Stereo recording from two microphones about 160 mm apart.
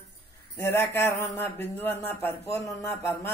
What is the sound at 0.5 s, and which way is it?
Speech, 15° left (ahead or behind).